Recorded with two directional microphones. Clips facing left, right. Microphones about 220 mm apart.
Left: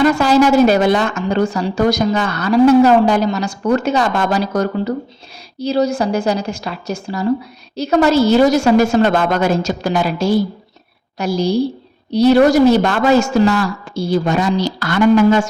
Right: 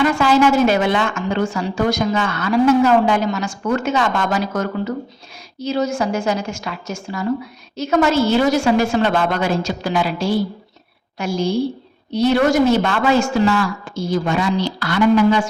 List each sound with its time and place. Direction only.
0.0 s a woman's voice: 40° left (ahead or behind)